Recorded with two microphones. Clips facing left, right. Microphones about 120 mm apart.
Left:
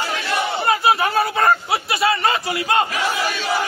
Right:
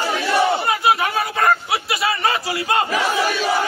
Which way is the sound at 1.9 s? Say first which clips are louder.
Left 2 dB; 25° left (ahead or behind).